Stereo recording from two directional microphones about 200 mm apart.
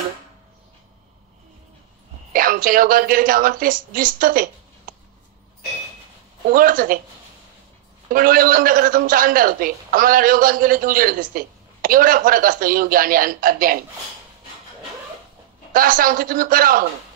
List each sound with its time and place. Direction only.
2.3 s a man's voice: 45° right (ahead or behind)
6.5 s a man's voice: 45° right (ahead or behind)
8.1 s a man's voice: 45° right (ahead or behind)
15.7 s a man's voice: 45° right (ahead or behind)